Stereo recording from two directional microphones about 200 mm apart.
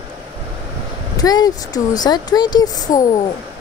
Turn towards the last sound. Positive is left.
turn(degrees=20)  # may be behind; listen again after turning